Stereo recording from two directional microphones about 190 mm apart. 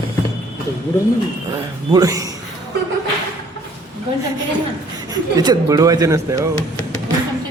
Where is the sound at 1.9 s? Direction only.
20° right (ahead or behind).